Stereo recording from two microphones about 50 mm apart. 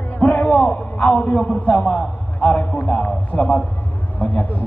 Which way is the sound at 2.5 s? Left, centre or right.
Left.